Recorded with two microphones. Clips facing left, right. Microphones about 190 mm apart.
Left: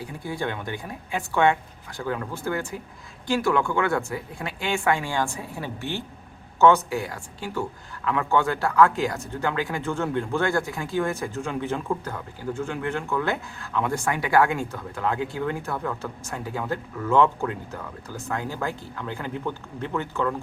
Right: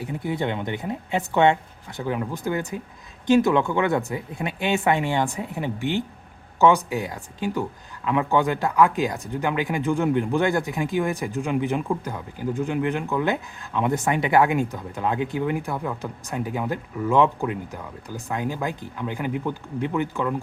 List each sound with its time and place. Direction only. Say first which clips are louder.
0.0 s speech: right 4 dB; 20° right (ahead or behind)